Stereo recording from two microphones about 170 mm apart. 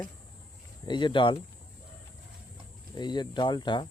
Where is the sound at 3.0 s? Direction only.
25° left (ahead or behind).